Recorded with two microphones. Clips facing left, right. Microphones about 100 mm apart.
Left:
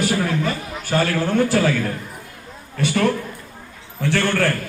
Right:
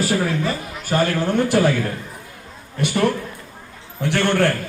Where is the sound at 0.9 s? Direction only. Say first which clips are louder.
Even; 15° right (ahead or behind).